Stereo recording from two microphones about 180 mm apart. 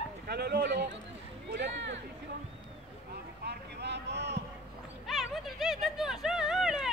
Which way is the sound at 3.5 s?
70° right (ahead or behind).